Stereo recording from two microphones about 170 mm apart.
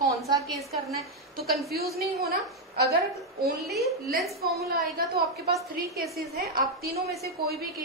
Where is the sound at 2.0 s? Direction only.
65° right (ahead or behind).